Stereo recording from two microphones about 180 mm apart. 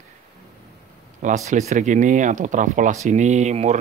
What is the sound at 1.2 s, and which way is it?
Speech, 40° right (ahead or behind).